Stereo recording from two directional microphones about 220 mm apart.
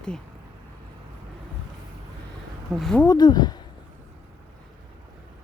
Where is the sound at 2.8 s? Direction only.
Centre (ahead or behind).